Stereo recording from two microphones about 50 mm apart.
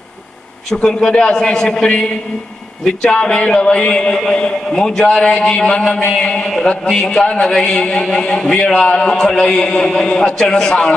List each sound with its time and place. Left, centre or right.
0.7 s a man's voice: centre
3.2 s a man's voice: left